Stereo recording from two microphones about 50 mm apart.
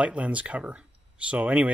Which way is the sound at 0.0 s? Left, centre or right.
Right.